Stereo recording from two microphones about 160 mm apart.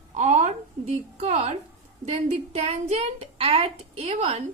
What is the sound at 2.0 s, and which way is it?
A woman's voice, 40° right (ahead or behind).